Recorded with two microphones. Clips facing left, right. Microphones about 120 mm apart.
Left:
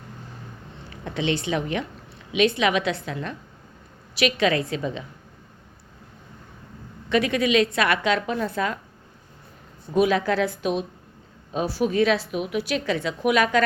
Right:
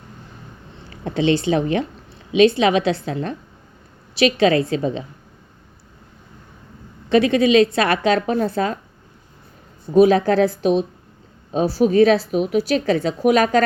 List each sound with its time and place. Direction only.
1.0 s a woman's voice: 35° right (ahead or behind)
7.1 s a woman's voice: 30° right (ahead or behind)
9.9 s a woman's voice: 35° right (ahead or behind)